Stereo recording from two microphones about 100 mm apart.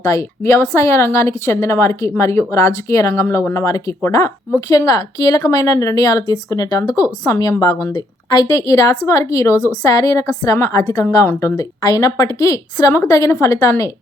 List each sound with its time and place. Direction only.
0.0 s a woman's voice: 30° left (ahead or behind)